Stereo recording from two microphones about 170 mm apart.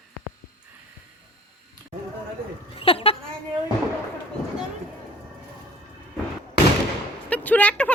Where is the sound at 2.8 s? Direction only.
35° left (ahead or behind).